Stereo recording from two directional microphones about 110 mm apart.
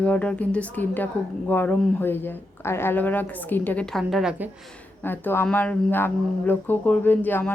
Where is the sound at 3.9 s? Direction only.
Centre (ahead or behind).